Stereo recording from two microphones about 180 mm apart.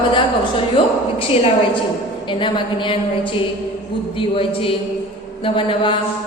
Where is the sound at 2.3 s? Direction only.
25° left (ahead or behind).